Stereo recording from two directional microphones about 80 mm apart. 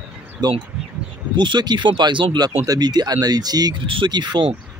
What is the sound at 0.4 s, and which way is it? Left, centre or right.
Speech, right.